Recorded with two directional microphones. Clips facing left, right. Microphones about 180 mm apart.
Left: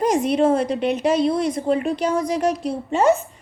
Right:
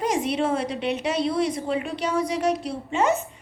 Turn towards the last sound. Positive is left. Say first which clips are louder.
# left 4 dB
turn(degrees=45)  # may be behind; listen again after turning